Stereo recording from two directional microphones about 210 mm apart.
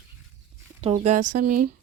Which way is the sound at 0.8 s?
30° right (ahead or behind).